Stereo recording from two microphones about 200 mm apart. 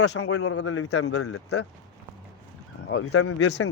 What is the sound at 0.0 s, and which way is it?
Speech, 75° left (ahead or behind).